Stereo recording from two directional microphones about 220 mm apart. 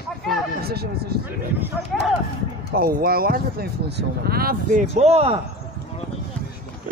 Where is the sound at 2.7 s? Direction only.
45° right (ahead or behind).